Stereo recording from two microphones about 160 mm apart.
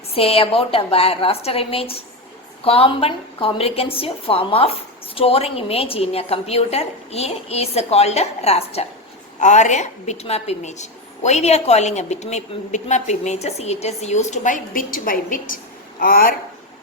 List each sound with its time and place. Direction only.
0.1 s a woman's voice: 35° left (ahead or behind); by 16.3 s 65° left (ahead or behind)